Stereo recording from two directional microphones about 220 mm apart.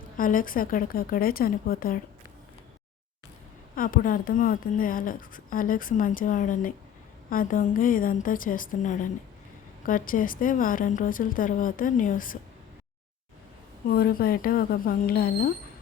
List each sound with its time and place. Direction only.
0.2 s a woman's voice: 40° left (ahead or behind)
3.8 s a woman's voice: 40° left (ahead or behind)
13.9 s speech: 45° left (ahead or behind)